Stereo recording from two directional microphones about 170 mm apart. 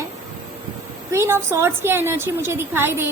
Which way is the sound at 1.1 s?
15° right (ahead or behind).